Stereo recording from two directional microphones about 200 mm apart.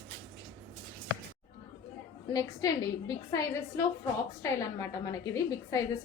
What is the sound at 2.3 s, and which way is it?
Speech, 20° left (ahead or behind).